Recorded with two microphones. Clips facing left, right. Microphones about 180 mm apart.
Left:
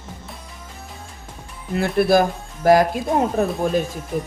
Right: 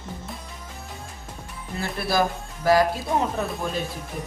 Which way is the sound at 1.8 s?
55° left (ahead or behind).